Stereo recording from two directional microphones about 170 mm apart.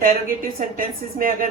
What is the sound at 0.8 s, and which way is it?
Speech, 55° right (ahead or behind).